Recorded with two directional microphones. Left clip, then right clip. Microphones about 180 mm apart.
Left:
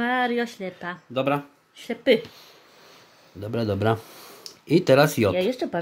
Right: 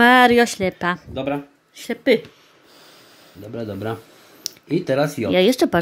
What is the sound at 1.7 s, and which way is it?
Speech, 25° right (ahead or behind).